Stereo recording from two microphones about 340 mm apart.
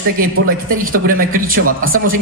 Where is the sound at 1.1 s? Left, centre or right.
Right.